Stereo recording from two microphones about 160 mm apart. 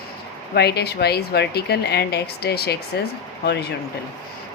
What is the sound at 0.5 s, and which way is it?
A woman's voice, 90° left.